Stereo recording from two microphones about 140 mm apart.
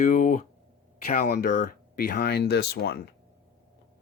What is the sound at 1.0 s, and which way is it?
Speech, 90° left.